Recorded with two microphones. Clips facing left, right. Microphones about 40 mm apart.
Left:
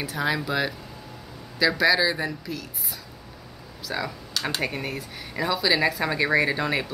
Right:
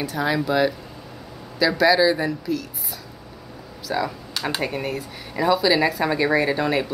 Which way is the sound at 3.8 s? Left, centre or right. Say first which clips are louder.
Right 5 dB; centre.